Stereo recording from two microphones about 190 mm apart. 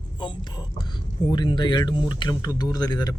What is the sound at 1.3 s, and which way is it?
Speech, 20° left (ahead or behind).